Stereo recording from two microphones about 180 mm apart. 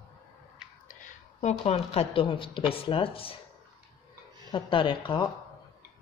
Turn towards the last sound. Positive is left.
turn(degrees=30)  # may be behind; listen again after turning